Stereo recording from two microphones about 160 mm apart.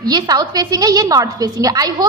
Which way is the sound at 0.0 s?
25° right (ahead or behind).